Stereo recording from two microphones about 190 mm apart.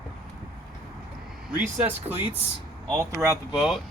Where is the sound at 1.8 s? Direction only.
10° right (ahead or behind).